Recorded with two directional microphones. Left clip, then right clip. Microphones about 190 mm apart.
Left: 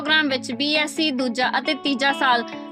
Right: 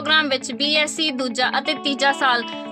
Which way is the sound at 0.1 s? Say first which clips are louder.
Right 1 dB; 50° left (ahead or behind).